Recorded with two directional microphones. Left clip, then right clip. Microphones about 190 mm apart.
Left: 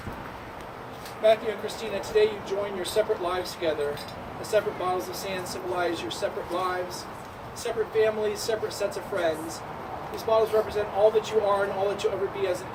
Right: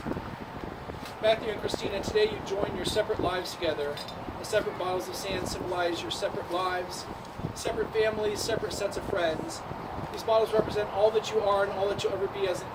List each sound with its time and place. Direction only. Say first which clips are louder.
1.2 s speech: left 4 dB; centre (ahead or behind)